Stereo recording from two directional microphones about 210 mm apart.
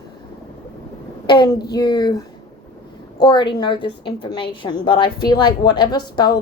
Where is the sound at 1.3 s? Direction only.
20° left (ahead or behind).